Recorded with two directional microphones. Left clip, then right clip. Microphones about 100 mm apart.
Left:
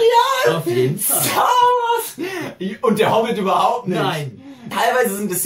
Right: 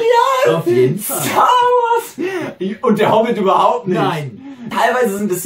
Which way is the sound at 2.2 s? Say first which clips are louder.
Right 5 dB; 5° left (ahead or behind).